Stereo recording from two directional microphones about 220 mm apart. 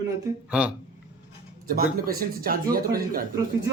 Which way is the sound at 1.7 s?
40° right (ahead or behind).